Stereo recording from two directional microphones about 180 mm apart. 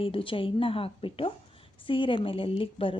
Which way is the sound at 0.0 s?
30° left (ahead or behind).